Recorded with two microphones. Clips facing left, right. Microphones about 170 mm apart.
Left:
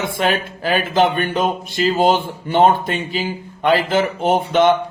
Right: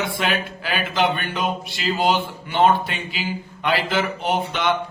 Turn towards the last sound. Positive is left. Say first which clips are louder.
# left 8 dB
turn(degrees=45)  # may be behind; listen again after turning